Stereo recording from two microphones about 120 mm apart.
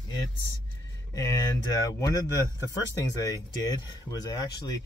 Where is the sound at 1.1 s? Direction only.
30° left (ahead or behind).